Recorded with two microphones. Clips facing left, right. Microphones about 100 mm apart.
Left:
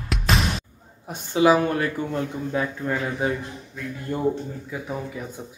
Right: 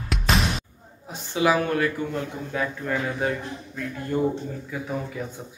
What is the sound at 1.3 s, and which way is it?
Speech, 30° left (ahead or behind).